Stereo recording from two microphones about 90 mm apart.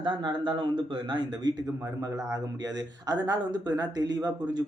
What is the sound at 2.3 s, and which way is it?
Speech, 45° right (ahead or behind).